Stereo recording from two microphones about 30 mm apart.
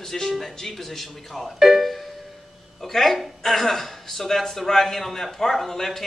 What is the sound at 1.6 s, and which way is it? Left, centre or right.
Music, centre.